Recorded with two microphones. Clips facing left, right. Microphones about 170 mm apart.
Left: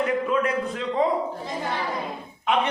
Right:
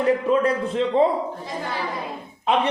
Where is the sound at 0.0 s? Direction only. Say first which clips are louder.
Right 4 dB; 30° right (ahead or behind).